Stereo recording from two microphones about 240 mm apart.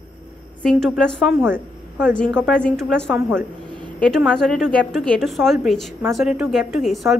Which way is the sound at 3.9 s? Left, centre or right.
Centre.